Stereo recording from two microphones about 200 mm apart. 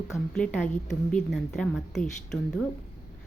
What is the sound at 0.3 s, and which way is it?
A woman's voice, 5° left (ahead or behind).